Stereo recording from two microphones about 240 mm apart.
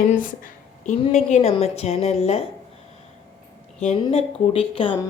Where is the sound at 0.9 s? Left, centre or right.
Left.